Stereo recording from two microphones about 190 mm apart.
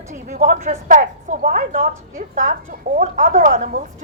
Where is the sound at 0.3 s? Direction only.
45° right (ahead or behind).